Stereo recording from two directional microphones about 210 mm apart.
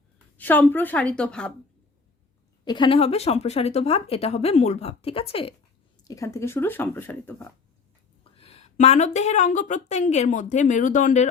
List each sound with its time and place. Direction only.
0.3 s a woman's voice: 10° left (ahead or behind)
2.6 s speech: 20° left (ahead or behind)
6.1 s speech: 15° left (ahead or behind)
8.4 s speech: 30° left (ahead or behind)